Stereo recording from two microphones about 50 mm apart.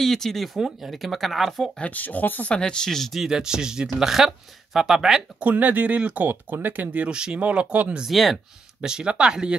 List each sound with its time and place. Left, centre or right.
0.0 s speech: centre
1.8 s speech: left
2.5 s speech: centre
3.1 s speech: centre
5.4 s speech: right
7.1 s speech: centre
7.3 s speech: right
8.1 s speech: centre
8.8 s speech: centre